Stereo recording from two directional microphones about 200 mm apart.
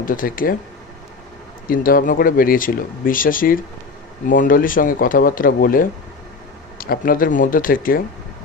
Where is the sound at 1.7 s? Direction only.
45° left (ahead or behind).